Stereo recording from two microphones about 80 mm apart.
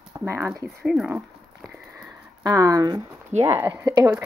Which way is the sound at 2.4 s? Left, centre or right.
Right.